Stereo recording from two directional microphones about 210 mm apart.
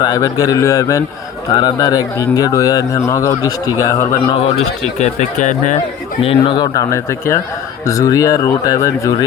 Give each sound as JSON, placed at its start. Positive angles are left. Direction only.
{"t": 0.0, "sound": "speech", "side_deg": 15}
{"t": 4.9, "sound": "speech", "side_deg": 35}
{"t": 6.2, "sound": "speech", "side_deg": 25}